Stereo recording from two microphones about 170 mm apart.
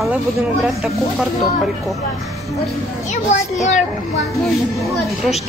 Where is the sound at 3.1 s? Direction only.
45° left (ahead or behind).